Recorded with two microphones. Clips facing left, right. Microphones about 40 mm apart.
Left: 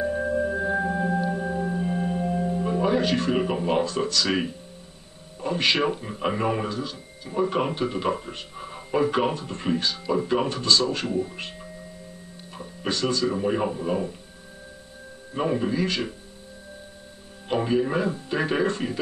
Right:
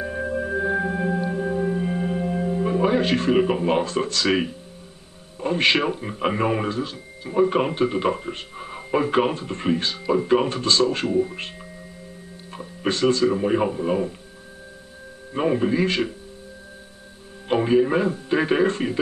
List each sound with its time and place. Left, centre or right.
0.0 s singing bowl: centre
4.1 s speech: right
11.1 s speech: centre
12.5 s music: right
13.3 s speech: centre
15.3 s speech: centre
17.5 s speech: centre